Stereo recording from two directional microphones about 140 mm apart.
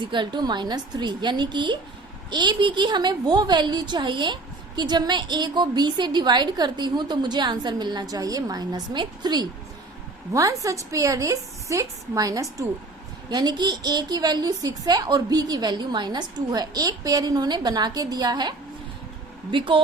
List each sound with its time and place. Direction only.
0.0 s a woman's voice: 35° right (ahead or behind)